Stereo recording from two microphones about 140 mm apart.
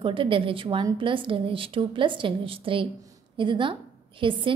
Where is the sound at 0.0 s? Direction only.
40° right (ahead or behind).